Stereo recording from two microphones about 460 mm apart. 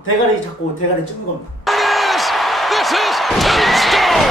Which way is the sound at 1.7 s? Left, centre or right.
Centre.